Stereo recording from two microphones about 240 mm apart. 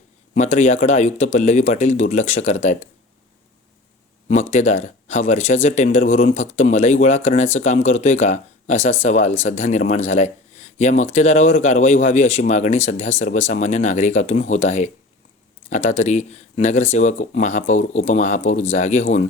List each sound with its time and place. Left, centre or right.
0.3 s speech: left
4.3 s speech: left